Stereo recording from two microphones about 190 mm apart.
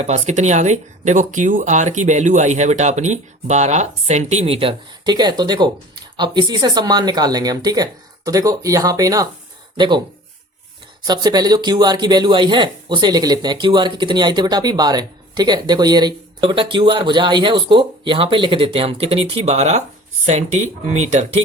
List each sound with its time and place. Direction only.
0.0 s speech: 35° right (ahead or behind)
11.0 s speech: 20° right (ahead or behind); by 21.4 s 35° right (ahead or behind)